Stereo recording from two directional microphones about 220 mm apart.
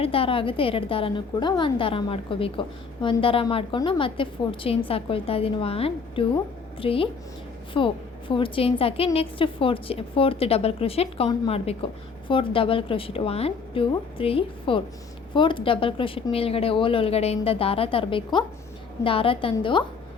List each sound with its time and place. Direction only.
0.0 s a woman's voice: 25° left (ahead or behind)